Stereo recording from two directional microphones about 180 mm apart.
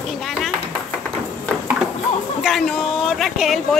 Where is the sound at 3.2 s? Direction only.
Centre (ahead or behind).